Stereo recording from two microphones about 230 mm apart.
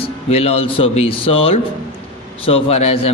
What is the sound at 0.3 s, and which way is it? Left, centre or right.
Speech, left.